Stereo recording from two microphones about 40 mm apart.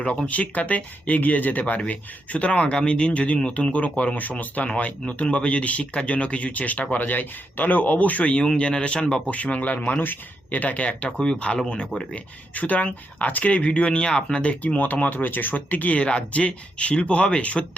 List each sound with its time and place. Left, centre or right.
0.3 s speech: left
10.0 s speech: left
11.2 s speech: centre
12.1 s speech: left
14.4 s speech: left
16.0 s speech: left